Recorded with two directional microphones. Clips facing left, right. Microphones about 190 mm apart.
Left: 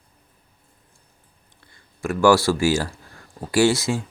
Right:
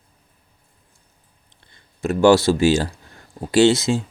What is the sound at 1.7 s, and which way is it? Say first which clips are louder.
Speech: right 3 dB; 25° right (ahead or behind).